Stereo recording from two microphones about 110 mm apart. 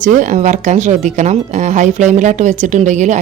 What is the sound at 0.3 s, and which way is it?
Speech, 90° right.